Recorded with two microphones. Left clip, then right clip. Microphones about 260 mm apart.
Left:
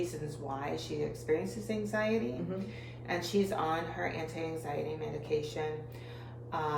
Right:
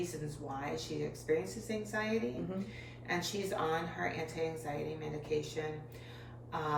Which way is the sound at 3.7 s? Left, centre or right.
Centre.